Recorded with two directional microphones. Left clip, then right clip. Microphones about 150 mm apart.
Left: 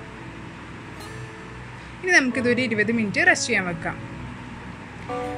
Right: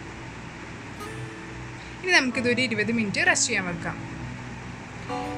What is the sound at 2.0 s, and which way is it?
Speech, 15° left (ahead or behind).